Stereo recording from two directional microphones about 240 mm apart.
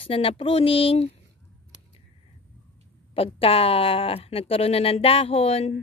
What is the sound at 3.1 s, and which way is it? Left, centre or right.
Speech, left.